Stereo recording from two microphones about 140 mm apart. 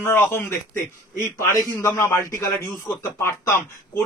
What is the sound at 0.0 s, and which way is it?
Speech, 15° left (ahead or behind).